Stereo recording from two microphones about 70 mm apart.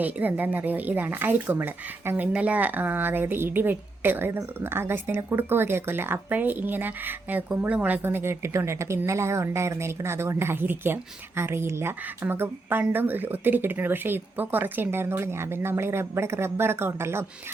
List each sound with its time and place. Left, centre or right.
0.0 s speech: right